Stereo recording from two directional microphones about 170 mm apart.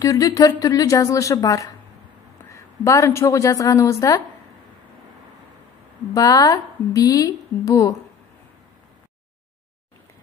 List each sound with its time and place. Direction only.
0.0 s a woman's voice: 20° left (ahead or behind)
6.1 s a woman's voice: 20° left (ahead or behind)